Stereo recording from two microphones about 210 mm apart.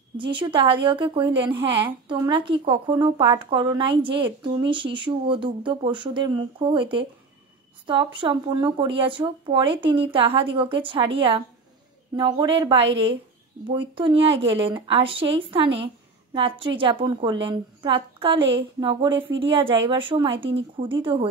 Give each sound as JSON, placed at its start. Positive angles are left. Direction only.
{"t": 0.2, "sound": "speech", "side_deg": -25}